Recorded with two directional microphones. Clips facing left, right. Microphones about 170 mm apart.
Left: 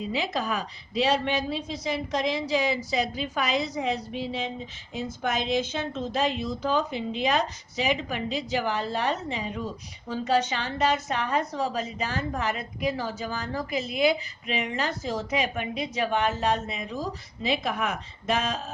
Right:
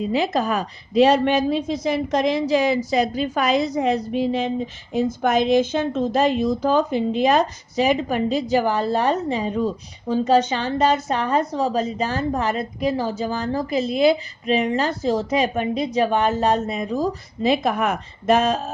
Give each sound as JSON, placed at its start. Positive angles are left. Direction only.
{"t": 0.0, "sound": "a woman's voice", "side_deg": -45}